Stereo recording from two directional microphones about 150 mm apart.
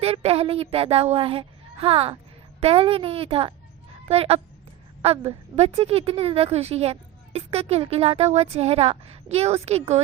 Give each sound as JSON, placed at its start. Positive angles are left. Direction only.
{"t": 0.0, "sound": "a woman's voice", "side_deg": -40}